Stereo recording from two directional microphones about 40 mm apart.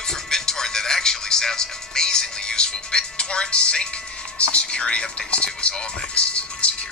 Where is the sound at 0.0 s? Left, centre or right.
Centre.